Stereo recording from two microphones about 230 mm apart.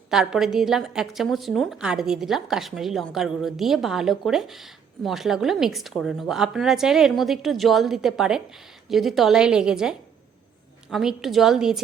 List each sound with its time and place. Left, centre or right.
0.1 s a woman's voice: centre
10.9 s a woman's voice: centre